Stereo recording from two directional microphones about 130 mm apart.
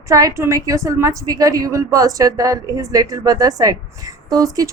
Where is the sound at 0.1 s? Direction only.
25° right (ahead or behind).